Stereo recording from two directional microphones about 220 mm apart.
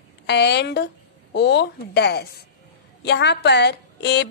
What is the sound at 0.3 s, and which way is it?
A woman's voice, 50° left (ahead or behind).